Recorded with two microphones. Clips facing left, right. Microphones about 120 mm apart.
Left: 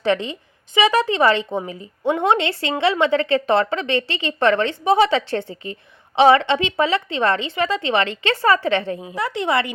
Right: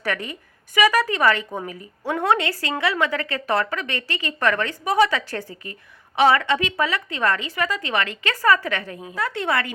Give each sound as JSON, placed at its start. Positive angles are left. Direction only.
{"t": 0.0, "sound": "a woman's voice", "side_deg": 25}